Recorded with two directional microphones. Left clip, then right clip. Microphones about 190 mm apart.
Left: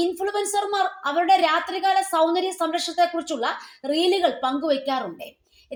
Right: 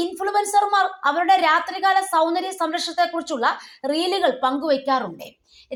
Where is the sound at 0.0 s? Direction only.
15° right (ahead or behind).